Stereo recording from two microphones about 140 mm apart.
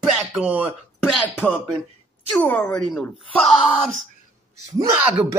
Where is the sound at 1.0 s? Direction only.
5° left (ahead or behind).